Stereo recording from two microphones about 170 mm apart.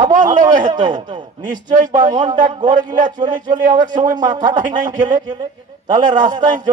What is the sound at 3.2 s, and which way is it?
Speech, 50° right (ahead or behind).